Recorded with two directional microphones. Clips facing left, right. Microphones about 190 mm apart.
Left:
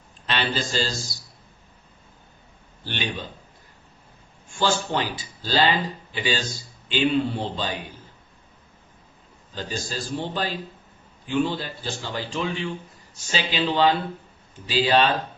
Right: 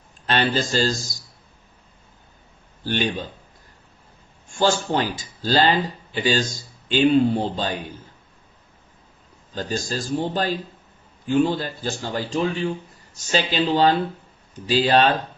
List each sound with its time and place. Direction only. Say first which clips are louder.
0.3 s a man's voice: right 5 dB; 45° right (ahead or behind)
2.8 s a man's voice: right 7 dB; 45° right (ahead or behind)
4.5 s a man's voice: right 3 dB; 45° right (ahead or behind)
9.6 s a man's voice: right 4 dB; 45° right (ahead or behind)